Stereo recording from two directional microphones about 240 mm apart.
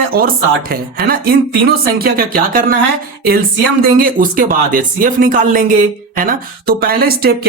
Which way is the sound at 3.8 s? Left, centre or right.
Right.